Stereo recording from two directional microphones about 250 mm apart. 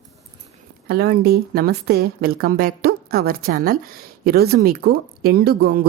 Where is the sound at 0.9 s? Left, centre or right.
Right.